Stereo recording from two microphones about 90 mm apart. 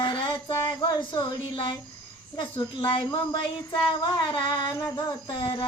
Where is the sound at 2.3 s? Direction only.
70° left (ahead or behind).